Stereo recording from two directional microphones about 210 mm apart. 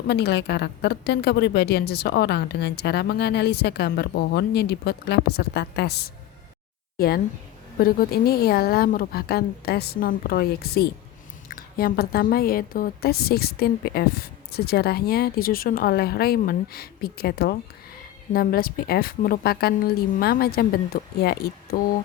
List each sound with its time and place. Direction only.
0.1 s a woman's voice: 50° left (ahead or behind)